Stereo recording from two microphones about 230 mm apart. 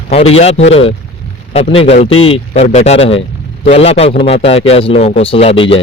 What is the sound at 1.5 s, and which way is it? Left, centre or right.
A man's voice, left.